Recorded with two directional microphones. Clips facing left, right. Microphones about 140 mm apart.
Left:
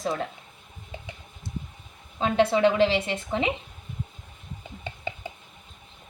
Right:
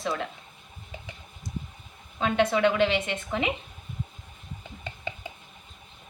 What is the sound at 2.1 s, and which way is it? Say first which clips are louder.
A woman's voice: left 2 dB; 30° left (ahead or behind).